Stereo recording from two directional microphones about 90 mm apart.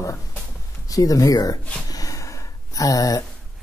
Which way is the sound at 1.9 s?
40° left (ahead or behind).